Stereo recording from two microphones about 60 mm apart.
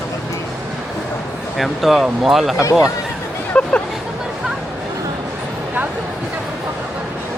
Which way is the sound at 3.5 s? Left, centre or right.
Left.